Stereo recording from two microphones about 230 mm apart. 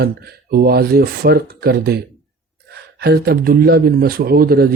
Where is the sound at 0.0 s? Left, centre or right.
Right.